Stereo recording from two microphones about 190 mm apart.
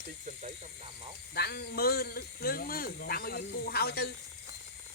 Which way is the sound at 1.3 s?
55° left (ahead or behind).